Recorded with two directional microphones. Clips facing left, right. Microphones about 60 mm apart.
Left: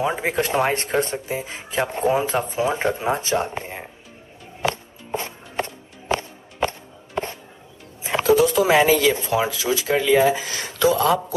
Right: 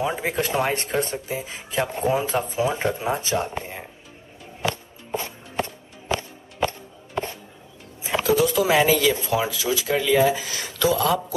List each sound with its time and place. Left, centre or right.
0.0 s speech: left
3.5 s music: left
8.2 s speech: left